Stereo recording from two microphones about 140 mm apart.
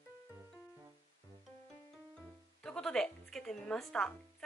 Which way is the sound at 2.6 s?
5° left (ahead or behind).